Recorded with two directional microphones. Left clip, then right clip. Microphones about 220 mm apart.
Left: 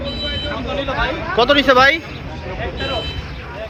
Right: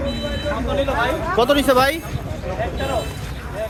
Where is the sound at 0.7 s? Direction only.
55° right (ahead or behind).